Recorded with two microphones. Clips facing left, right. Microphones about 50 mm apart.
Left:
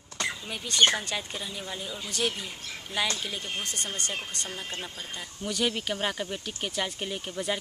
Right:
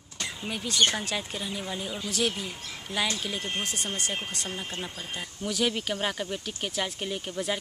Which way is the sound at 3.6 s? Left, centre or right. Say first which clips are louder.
Right 2 dB; centre.